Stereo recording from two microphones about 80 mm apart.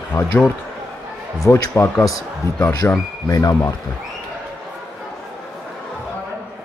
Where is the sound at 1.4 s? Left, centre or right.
Left.